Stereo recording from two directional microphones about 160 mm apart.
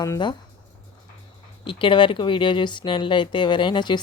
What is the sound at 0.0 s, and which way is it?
Speech, 25° left (ahead or behind).